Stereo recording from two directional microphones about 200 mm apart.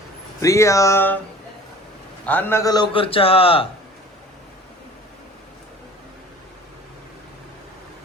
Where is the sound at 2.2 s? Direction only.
10° left (ahead or behind); by 3.7 s 30° left (ahead or behind).